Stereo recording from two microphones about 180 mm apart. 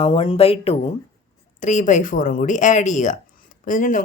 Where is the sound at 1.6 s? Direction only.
45° left (ahead or behind).